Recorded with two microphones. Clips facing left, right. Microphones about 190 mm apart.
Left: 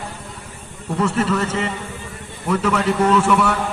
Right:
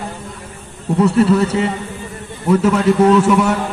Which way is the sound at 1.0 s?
35° right (ahead or behind).